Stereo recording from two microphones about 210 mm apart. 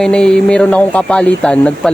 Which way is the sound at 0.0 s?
5° left (ahead or behind).